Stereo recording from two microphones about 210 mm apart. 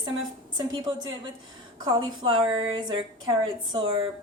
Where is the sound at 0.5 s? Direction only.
20° right (ahead or behind).